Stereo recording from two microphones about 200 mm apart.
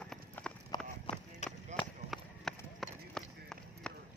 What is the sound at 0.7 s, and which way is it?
Run, 20° left (ahead or behind).